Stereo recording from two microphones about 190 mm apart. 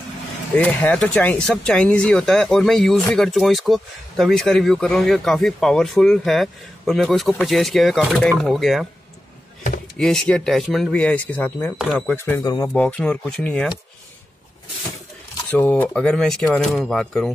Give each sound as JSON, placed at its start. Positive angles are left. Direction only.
{"t": 0.6, "sound": "speech", "side_deg": 10}
{"t": 9.9, "sound": "speech", "side_deg": 5}
{"t": 12.2, "sound": "speech", "side_deg": 15}
{"t": 12.7, "sound": "speech", "side_deg": 5}
{"t": 15.5, "sound": "speech", "side_deg": 10}